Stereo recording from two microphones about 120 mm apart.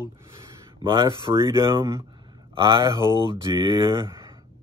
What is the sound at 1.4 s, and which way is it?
Speech, 45° right (ahead or behind).